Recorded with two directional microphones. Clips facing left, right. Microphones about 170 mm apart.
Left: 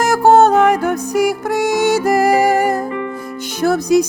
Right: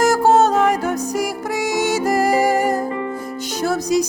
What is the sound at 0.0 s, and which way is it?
Music, 65° left (ahead or behind).